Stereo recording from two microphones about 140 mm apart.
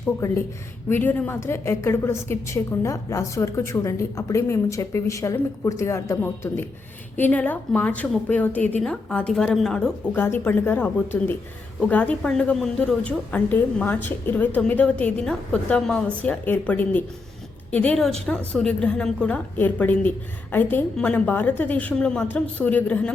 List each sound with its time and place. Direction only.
0.2 s a woman's voice: 20° left (ahead or behind); by 9.9 s 5° left (ahead or behind)
10.1 s a woman's voice: 15° left (ahead or behind)